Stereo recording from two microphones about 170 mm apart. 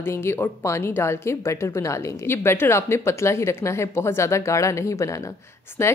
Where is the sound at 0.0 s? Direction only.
15° left (ahead or behind).